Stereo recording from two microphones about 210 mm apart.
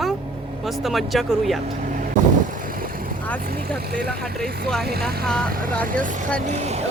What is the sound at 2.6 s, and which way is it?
Vehicle, 40° right (ahead or behind).